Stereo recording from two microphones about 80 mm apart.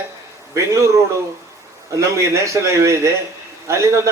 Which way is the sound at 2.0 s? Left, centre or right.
Right.